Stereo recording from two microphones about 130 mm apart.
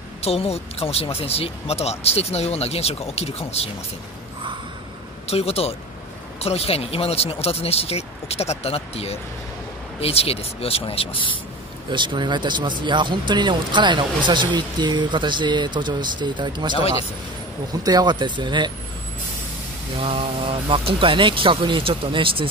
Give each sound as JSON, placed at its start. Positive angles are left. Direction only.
{"t": 0.2, "sound": "speech", "side_deg": 50}
{"t": 5.3, "sound": "speech", "side_deg": 50}
{"t": 11.9, "sound": "speech", "side_deg": -35}
{"t": 17.8, "sound": "speech", "side_deg": -30}
{"t": 20.0, "sound": "speech", "side_deg": -45}